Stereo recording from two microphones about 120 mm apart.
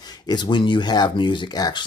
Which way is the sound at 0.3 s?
40° left (ahead or behind).